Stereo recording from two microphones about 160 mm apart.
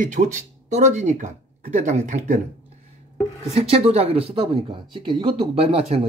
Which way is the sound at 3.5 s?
40° right (ahead or behind).